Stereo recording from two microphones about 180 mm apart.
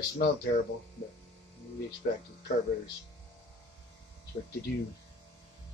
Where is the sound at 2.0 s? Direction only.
50° left (ahead or behind).